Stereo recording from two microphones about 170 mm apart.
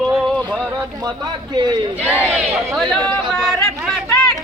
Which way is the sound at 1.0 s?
25° right (ahead or behind).